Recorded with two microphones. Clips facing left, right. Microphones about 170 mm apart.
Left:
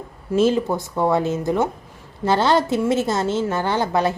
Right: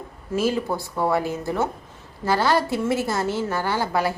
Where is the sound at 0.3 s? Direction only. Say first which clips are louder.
Left 5 dB; 20° left (ahead or behind).